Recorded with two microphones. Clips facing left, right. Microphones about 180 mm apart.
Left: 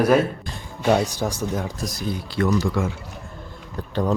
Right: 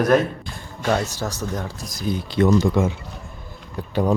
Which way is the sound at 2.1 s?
20° right (ahead or behind).